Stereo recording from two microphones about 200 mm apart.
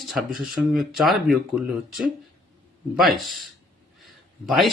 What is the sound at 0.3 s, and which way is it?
Speech, centre (ahead or behind).